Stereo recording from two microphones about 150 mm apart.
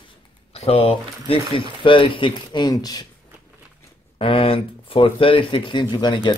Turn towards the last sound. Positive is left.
turn(degrees=30)  # may be behind; listen again after turning